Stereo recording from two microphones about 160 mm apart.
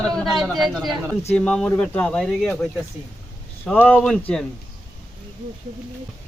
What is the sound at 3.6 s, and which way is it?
Speech, 10° left (ahead or behind).